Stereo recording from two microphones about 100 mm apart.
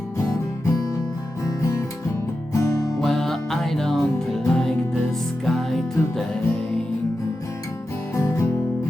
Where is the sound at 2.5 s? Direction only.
30° left (ahead or behind).